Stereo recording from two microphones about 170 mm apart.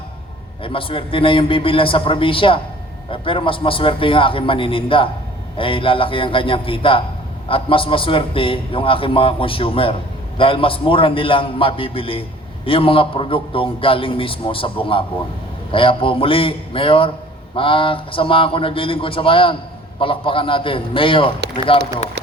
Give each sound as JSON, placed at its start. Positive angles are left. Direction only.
{"t": 0.6, "sound": "a man's voice", "side_deg": 30}